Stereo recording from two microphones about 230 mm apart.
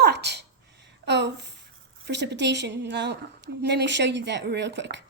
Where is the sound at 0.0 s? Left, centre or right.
Right.